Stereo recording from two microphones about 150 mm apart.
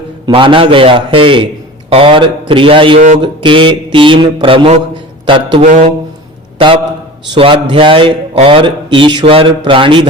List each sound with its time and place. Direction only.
0.3 s speech: 35° right (ahead or behind)
5.6 s speech: 55° right (ahead or behind)
7.3 s speech: 35° right (ahead or behind)